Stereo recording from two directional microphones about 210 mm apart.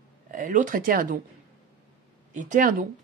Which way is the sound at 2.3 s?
35° right (ahead or behind).